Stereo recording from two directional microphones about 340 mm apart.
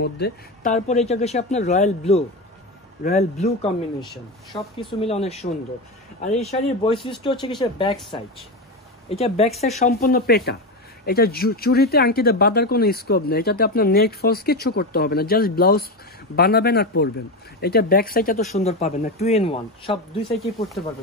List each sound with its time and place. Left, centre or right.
0.0 s speech: left
9.1 s speech: centre